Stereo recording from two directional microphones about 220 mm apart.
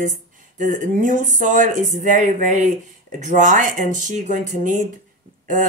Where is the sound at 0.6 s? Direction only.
35° right (ahead or behind).